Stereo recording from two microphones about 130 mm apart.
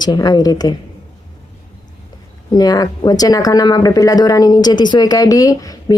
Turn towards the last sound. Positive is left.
turn(degrees=30)  # may be behind; listen again after turning